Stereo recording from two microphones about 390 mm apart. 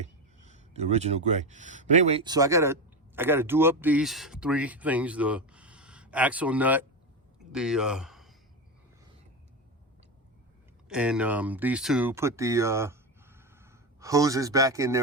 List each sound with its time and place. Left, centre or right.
0.0 s speech: centre
10.8 s speech: centre